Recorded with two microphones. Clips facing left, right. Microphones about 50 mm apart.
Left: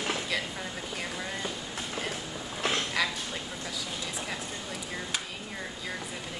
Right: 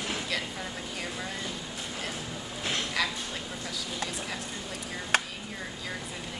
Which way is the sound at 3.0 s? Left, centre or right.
Centre.